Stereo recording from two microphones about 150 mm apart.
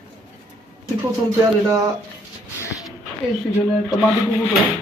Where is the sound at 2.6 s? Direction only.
20° left (ahead or behind).